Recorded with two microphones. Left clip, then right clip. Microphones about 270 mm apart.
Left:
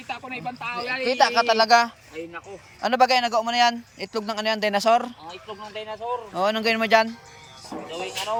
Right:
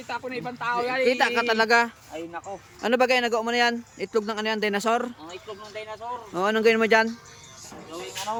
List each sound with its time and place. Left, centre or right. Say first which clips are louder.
0.1 s speech: right 1 dB; centre
0.7 s speech: right 4 dB; left
1.0 s speech: left 4 dB; centre
6.3 s speech: right 2 dB; centre